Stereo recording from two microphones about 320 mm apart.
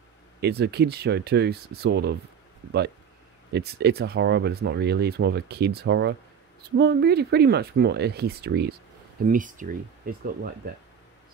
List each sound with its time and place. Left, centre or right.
0.4 s speech: right
3.5 s speech: right